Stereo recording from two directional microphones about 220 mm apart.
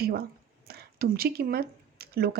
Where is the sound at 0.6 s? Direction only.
45° right (ahead or behind).